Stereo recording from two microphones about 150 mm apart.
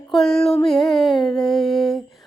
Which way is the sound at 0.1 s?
Centre (ahead or behind).